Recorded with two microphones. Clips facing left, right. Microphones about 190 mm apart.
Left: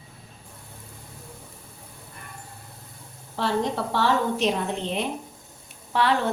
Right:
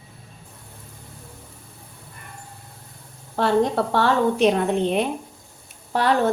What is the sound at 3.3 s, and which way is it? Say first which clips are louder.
A woman's voice: right 6 dB; 55° right (ahead or behind).